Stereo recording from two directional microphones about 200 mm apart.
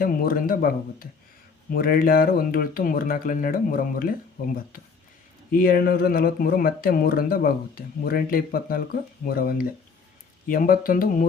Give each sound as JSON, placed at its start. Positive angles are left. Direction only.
{"t": 0.0, "sound": "speech", "side_deg": 45}